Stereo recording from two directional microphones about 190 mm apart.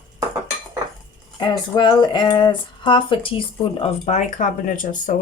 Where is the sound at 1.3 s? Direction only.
20° left (ahead or behind); by 5.1 s 40° left (ahead or behind).